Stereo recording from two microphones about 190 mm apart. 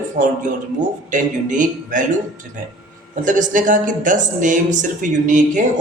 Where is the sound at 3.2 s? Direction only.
45° right (ahead or behind).